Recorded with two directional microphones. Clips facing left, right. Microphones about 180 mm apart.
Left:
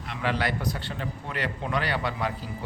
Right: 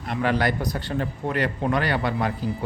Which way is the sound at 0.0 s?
45° right (ahead or behind).